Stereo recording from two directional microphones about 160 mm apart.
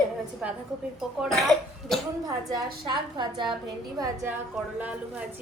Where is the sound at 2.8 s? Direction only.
30° right (ahead or behind).